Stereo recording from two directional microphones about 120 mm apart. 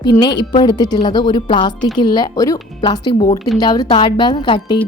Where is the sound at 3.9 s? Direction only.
45° left (ahead or behind).